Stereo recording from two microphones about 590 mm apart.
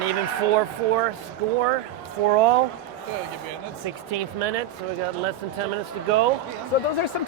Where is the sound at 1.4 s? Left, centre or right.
Right.